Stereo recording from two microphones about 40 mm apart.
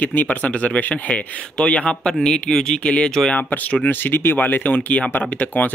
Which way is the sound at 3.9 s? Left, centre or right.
Left.